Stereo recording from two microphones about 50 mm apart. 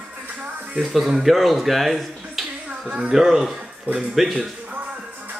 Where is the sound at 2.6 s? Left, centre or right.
Right.